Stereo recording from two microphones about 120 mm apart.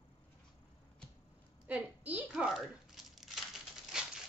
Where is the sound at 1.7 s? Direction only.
10° right (ahead or behind).